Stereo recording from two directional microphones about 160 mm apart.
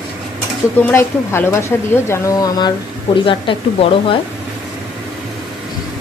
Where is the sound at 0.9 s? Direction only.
15° left (ahead or behind); by 3.6 s 30° left (ahead or behind).